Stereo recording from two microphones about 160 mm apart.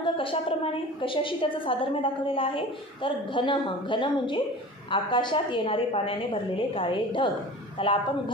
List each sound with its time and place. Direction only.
0.0 s a woman's voice: 35° left (ahead or behind)